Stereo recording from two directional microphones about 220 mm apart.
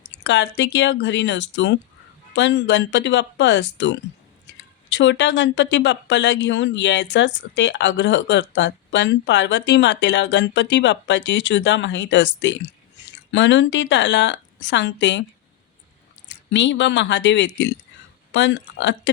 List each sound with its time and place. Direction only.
0.3 s speech: 50° left (ahead or behind)
16.5 s speech: 55° left (ahead or behind)